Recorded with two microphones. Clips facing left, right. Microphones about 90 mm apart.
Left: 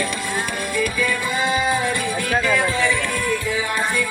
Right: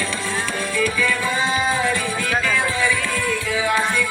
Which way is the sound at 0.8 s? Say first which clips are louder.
Right 1 dB; 15° left (ahead or behind).